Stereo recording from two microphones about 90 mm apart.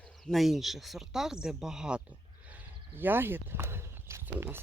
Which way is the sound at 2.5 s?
20° right (ahead or behind).